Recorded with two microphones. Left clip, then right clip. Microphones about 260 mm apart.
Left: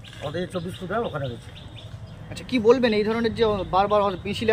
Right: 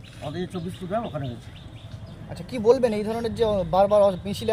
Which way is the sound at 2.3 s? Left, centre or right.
Right.